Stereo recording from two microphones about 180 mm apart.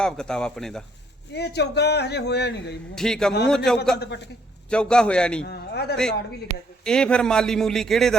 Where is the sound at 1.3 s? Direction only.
65° left (ahead or behind).